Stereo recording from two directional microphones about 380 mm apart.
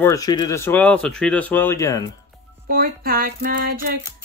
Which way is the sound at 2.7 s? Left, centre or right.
Right.